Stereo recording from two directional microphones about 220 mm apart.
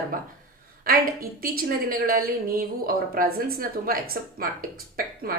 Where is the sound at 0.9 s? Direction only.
40° right (ahead or behind).